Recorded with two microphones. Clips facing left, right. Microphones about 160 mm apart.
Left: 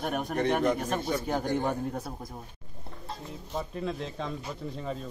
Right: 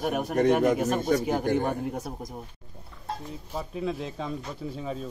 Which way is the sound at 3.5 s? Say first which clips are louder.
Right 2 dB; 5° right (ahead or behind).